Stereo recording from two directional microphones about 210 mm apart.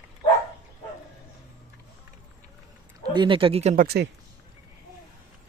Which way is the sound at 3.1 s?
25° right (ahead or behind).